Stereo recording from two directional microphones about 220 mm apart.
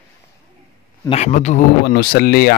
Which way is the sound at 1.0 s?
30° left (ahead or behind).